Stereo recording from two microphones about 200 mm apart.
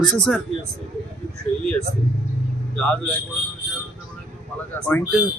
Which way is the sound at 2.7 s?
5° left (ahead or behind).